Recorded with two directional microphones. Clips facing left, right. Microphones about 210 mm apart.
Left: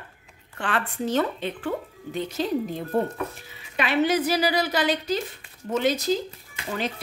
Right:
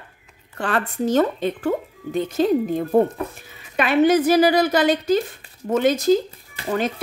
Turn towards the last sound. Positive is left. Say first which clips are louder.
# right 6 dB
turn(degrees=-50)  # may be behind; listen again after turning